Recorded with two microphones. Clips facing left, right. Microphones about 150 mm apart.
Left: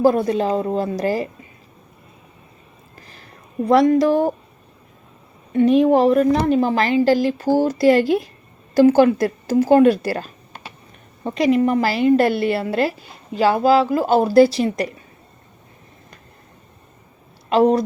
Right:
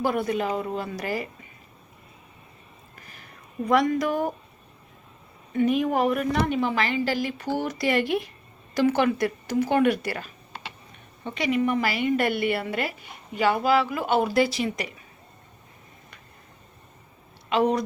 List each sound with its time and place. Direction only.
0.0 s speech: 35° left (ahead or behind)
3.1 s a sound: 35° left (ahead or behind)
5.5 s speech: 35° left (ahead or behind)
10.1 s typing: 40° left (ahead or behind)
11.2 s speech: 40° left (ahead or behind)
17.5 s speech: 35° left (ahead or behind)